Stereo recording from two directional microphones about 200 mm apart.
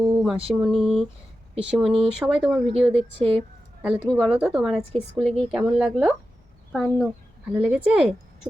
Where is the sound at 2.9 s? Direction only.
30° right (ahead or behind).